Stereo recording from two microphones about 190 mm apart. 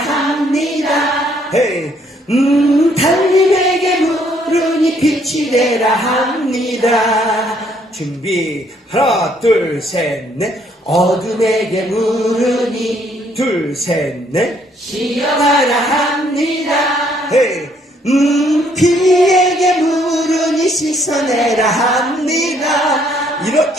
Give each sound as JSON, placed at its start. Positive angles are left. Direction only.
{"t": 0.0, "sound": "singing", "side_deg": 0}
{"t": 2.3, "sound": "music", "side_deg": 0}
{"t": 9.0, "sound": "music", "side_deg": 0}
{"t": 18.0, "sound": "singing", "side_deg": 0}